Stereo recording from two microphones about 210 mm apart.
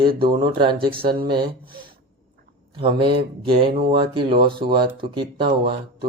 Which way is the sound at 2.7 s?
25° right (ahead or behind).